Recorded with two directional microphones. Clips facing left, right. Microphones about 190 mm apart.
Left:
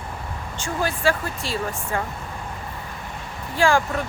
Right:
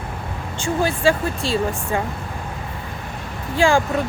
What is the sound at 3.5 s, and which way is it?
Speech, 25° right (ahead or behind).